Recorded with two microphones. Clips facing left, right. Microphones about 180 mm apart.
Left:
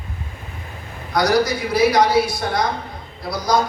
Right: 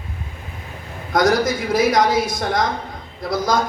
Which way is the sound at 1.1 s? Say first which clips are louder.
Right 1 dB; 45° right (ahead or behind).